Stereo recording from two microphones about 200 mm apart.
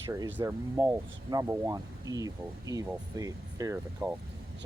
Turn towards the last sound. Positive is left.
turn(degrees=-10)  # may be behind; listen again after turning